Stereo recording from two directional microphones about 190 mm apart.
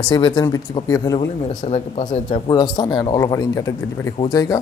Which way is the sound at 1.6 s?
35° left (ahead or behind).